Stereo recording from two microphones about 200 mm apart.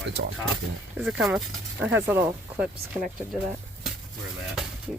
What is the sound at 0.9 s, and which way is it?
Speech, centre (ahead or behind).